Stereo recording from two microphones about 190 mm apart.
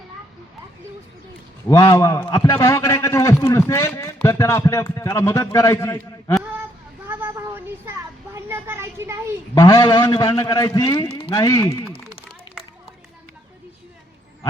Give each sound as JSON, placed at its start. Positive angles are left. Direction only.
{"t": 1.6, "sound": "a man's voice", "side_deg": 15}
{"t": 7.1, "sound": "a sound", "side_deg": -10}
{"t": 9.6, "sound": "a man's voice", "side_deg": 20}